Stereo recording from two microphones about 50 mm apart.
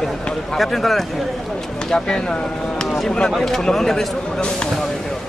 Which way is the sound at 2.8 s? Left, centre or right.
Centre.